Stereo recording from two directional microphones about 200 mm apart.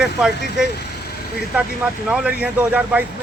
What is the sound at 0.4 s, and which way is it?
Speech, 55° left (ahead or behind).